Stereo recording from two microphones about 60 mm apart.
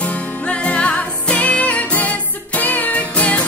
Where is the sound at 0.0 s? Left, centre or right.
Left.